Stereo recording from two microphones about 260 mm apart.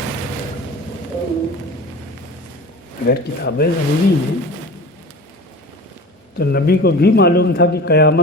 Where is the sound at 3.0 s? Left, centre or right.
Left.